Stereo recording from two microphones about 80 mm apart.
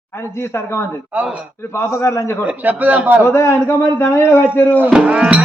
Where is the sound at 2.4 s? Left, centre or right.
Right.